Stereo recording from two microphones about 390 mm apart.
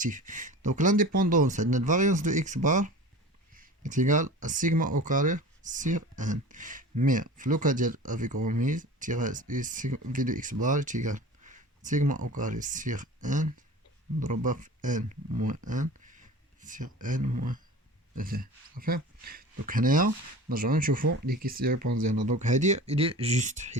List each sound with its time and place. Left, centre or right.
0.0 s speech: centre